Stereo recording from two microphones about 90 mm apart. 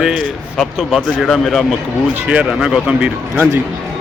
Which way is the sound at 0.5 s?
5° left (ahead or behind).